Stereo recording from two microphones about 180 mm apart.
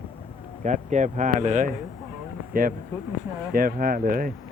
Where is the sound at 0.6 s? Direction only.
40° right (ahead or behind).